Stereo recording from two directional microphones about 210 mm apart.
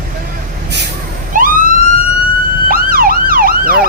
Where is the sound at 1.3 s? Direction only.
40° right (ahead or behind).